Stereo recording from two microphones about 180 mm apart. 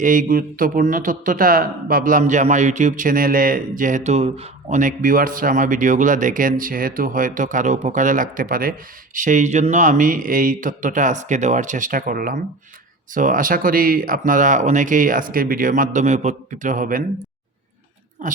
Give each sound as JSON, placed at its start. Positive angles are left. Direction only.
{"t": 0.0, "sound": "speech", "side_deg": -50}